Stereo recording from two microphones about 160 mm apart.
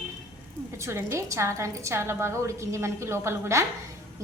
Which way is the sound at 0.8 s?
15° right (ahead or behind).